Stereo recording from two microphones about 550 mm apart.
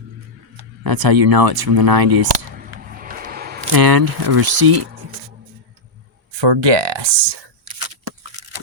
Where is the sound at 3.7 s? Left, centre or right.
Right.